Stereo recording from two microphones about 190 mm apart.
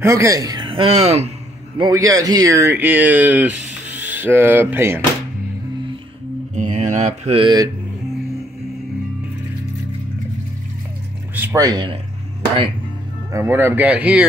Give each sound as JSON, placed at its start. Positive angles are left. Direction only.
{"t": 0.0, "sound": "speech", "side_deg": -15}
{"t": 1.8, "sound": "speech", "side_deg": -20}
{"t": 6.5, "sound": "mantra", "side_deg": -40}
{"t": 11.3, "sound": "speech", "side_deg": -15}
{"t": 13.3, "sound": "speech", "side_deg": -15}